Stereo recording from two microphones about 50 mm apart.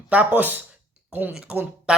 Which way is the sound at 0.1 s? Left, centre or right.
Right.